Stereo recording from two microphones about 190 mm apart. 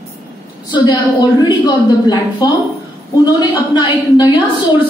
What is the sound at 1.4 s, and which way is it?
A woman's voice, 20° left (ahead or behind).